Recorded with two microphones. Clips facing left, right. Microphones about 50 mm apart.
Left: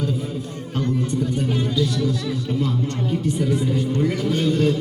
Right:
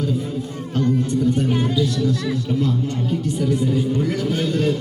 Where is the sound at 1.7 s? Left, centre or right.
Centre.